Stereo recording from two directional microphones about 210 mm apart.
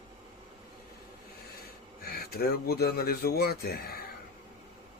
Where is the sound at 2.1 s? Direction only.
45° left (ahead or behind).